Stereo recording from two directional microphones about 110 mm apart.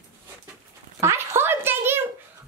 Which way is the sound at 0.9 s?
25° right (ahead or behind).